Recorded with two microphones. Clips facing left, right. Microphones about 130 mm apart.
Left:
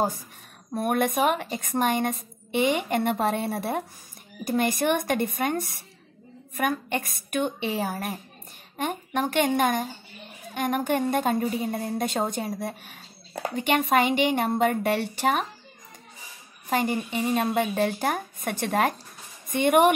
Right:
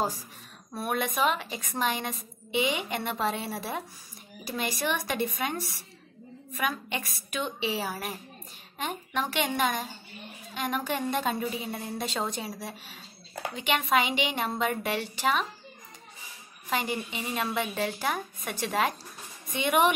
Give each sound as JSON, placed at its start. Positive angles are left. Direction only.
{"t": 0.7, "sound": "a woman's voice", "side_deg": 50}
{"t": 16.6, "sound": "a woman's voice", "side_deg": 45}